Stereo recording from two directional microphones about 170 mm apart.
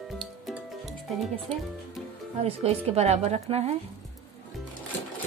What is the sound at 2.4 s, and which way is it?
Speech, 40° right (ahead or behind).